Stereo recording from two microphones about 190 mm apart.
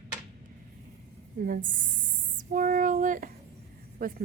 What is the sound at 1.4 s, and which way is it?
A woman's voice, 50° right (ahead or behind).